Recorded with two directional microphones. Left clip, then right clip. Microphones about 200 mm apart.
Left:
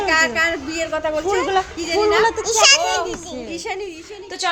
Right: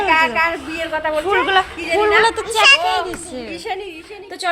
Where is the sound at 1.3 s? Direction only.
10° left (ahead or behind).